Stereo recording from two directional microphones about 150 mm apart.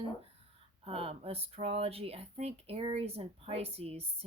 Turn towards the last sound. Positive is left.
turn(degrees=-40)  # may be behind; listen again after turning